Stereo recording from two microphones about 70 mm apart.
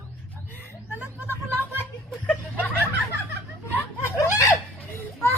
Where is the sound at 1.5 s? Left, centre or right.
Right.